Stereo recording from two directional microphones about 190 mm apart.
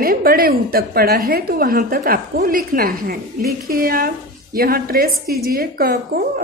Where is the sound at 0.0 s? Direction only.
50° right (ahead or behind).